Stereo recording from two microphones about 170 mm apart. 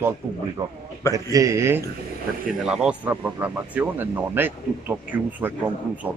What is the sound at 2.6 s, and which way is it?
Speech, 5° right (ahead or behind).